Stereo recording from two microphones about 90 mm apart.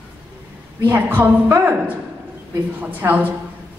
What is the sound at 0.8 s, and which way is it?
Speech, 20° right (ahead or behind).